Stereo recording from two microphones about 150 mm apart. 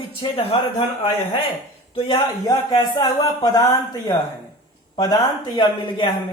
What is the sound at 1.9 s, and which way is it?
Speech, 30° left (ahead or behind).